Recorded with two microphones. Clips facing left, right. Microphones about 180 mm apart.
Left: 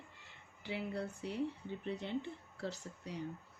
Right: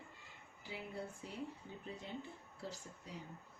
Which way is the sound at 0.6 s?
75° left (ahead or behind).